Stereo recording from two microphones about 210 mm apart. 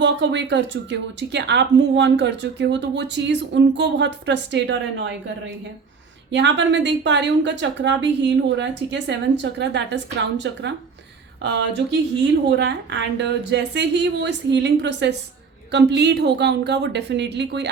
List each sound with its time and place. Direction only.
0.0 s a woman's voice: 55° right (ahead or behind)
6.3 s a woman's voice: 55° right (ahead or behind)
11.8 s a woman's voice: 50° right (ahead or behind)